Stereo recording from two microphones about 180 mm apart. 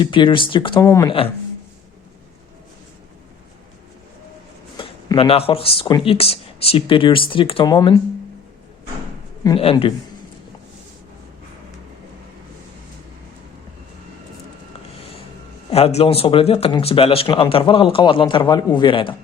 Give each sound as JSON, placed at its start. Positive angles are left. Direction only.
{"t": 0.0, "sound": "speech", "side_deg": 30}
{"t": 0.9, "sound": "speech", "side_deg": 15}
{"t": 4.8, "sound": "speech", "side_deg": 30}
{"t": 9.6, "sound": "speech", "side_deg": 30}
{"t": 15.7, "sound": "speech", "side_deg": 35}